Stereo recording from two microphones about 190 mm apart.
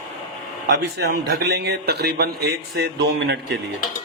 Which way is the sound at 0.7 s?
55° right (ahead or behind).